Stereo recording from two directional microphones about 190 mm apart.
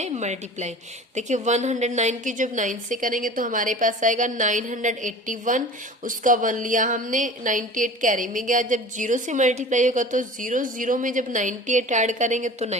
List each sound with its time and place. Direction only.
0.0 s a woman's voice: 35° right (ahead or behind)